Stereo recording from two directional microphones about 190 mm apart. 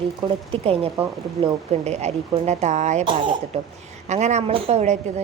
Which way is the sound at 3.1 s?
25° right (ahead or behind).